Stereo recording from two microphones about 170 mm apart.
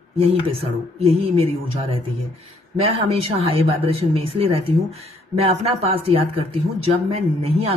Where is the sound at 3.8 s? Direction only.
35° right (ahead or behind).